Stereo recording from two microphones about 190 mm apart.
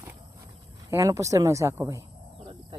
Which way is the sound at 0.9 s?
15° right (ahead or behind).